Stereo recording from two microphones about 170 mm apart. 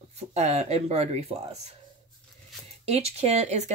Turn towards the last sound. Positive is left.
turn(degrees=-40)  # may be behind; listen again after turning